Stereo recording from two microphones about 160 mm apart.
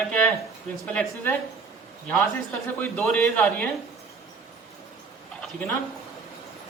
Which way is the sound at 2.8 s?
10° left (ahead or behind).